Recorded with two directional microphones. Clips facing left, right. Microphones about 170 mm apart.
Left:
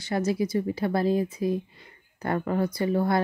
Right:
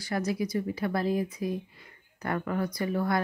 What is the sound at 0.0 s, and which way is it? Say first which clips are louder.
Speech: left 4 dB; 25° left (ahead or behind).